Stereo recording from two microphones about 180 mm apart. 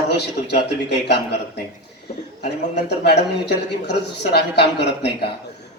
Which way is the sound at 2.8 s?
70° left (ahead or behind).